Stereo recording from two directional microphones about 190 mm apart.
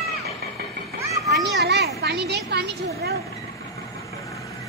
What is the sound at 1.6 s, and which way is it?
A woman's voice, 60° right (ahead or behind).